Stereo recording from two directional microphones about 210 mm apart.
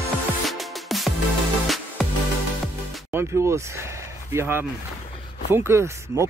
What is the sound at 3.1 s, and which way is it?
Speech, 10° right (ahead or behind).